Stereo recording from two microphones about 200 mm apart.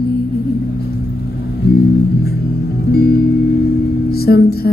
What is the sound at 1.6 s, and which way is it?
Music, 50° left (ahead or behind).